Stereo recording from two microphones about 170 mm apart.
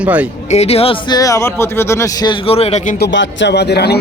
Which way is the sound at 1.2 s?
20° left (ahead or behind).